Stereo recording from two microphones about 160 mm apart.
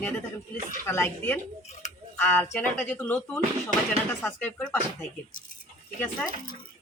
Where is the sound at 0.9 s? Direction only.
15° left (ahead or behind).